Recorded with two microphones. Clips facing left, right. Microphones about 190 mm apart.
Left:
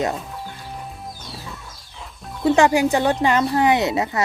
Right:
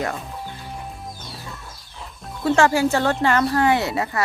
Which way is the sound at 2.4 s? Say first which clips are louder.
Left 2 dB; 15° left (ahead or behind).